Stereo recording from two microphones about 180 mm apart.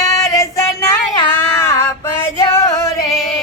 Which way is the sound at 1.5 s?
15° left (ahead or behind).